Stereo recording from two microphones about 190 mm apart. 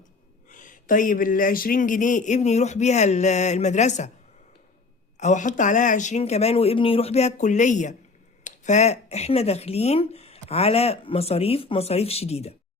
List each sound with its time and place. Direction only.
0.4 s speech: 45° left (ahead or behind)
5.1 s speech: 40° left (ahead or behind)